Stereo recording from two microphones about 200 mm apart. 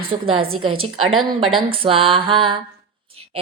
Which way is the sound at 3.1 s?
30° right (ahead or behind).